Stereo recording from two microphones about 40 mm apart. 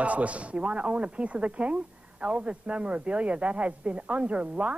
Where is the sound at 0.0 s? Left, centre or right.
Right.